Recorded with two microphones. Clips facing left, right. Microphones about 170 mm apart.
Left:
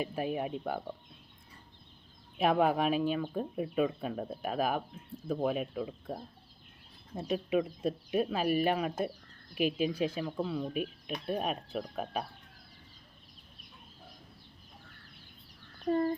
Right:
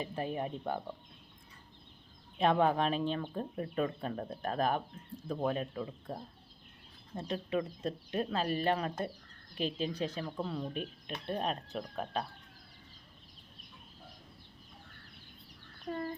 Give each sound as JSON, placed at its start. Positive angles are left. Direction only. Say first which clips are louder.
{"t": 0.0, "sound": "speech", "louder": "left 3 dB", "side_deg": 10}
{"t": 2.4, "sound": "speech", "louder": "left 1 dB", "side_deg": 5}
{"t": 7.2, "sound": "speech", "louder": "left 4 dB", "side_deg": 10}
{"t": 15.9, "sound": "speech", "louder": "left 9 dB", "side_deg": 40}